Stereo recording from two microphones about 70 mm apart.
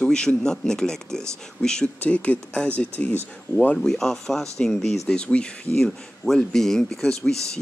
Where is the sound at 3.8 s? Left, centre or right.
Centre.